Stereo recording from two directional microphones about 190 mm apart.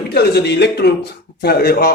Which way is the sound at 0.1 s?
60° left (ahead or behind).